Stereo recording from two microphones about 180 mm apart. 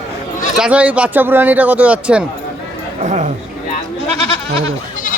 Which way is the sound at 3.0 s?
40° right (ahead or behind).